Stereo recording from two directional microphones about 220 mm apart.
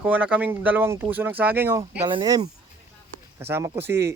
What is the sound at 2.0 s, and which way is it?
Speech, 20° right (ahead or behind).